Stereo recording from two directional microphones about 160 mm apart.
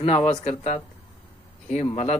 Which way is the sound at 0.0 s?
35° left (ahead or behind).